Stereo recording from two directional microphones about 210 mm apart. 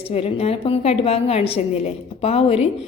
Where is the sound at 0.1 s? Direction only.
30° left (ahead or behind).